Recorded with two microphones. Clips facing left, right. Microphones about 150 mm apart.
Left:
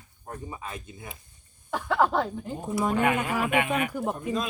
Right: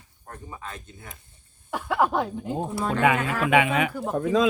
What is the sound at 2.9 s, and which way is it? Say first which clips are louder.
Speech: right 3 dB; 90° right.